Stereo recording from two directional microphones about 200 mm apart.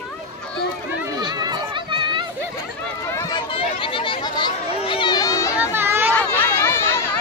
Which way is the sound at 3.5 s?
25° left (ahead or behind).